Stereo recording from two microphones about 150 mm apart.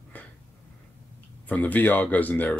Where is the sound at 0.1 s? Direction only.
10° left (ahead or behind).